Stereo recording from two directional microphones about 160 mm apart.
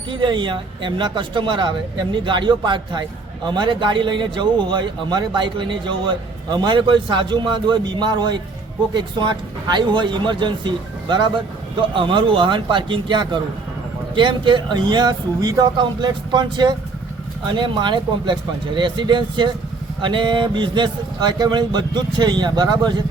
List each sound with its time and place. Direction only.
0.1 s speech: 30° right (ahead or behind)